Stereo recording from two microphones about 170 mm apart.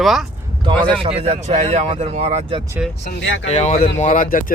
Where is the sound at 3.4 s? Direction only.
40° left (ahead or behind).